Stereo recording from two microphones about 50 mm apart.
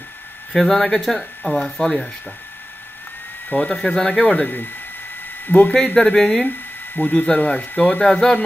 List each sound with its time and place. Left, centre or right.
0.5 s speech: centre
3.6 s speech: centre
5.5 s speech: left
5.9 s speech: left
7.0 s speech: left
8.1 s speech: centre